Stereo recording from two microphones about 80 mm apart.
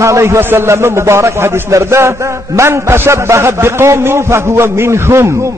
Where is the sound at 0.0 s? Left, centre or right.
Right.